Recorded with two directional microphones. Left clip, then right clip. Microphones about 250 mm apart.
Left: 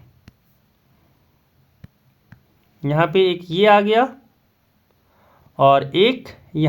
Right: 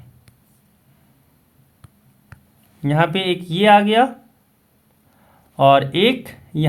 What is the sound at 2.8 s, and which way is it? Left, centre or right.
Speech, left.